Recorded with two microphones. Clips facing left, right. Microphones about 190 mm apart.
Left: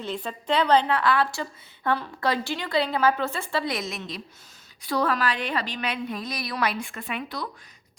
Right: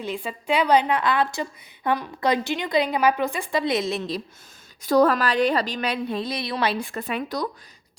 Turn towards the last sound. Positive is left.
turn(degrees=-40)  # may be behind; listen again after turning